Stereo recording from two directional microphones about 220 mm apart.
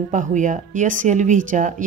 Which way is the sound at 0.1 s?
35° right (ahead or behind).